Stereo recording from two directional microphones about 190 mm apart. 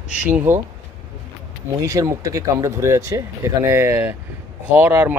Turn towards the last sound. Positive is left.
turn(degrees=-10)  # may be behind; listen again after turning